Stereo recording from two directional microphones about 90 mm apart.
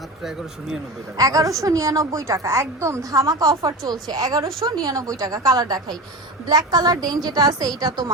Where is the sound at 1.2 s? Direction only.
40° right (ahead or behind).